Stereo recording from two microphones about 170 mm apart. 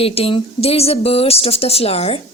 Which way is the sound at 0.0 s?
35° left (ahead or behind).